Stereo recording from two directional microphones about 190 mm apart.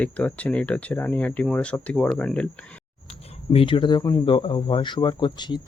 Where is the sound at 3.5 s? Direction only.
25° left (ahead or behind).